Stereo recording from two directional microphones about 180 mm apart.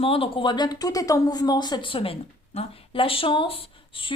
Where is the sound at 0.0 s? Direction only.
30° left (ahead or behind).